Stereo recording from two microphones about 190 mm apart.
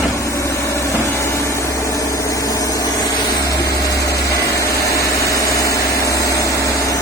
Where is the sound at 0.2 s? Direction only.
15° left (ahead or behind).